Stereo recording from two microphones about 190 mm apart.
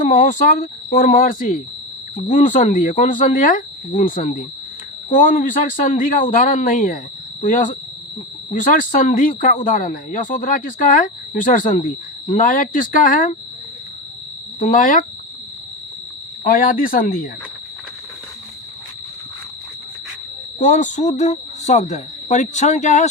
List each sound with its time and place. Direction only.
0.1 s speech: 40° left (ahead or behind)
14.6 s speech: 45° left (ahead or behind)
16.4 s speech: 45° left (ahead or behind)
20.6 s speech: 40° left (ahead or behind)